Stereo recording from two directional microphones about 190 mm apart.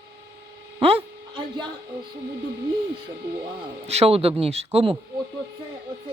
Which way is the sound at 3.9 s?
35° right (ahead or behind).